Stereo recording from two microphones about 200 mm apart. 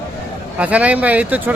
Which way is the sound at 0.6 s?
5° right (ahead or behind).